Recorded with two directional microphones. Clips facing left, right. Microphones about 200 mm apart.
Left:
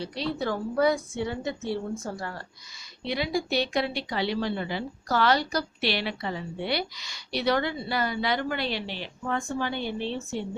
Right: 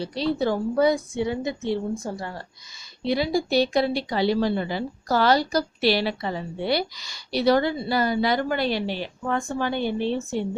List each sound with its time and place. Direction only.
0.0 s a woman's voice: 35° right (ahead or behind)
3.0 s a woman's voice: 35° right (ahead or behind)